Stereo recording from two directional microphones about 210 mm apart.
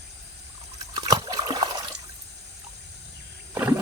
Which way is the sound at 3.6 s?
10° right (ahead or behind).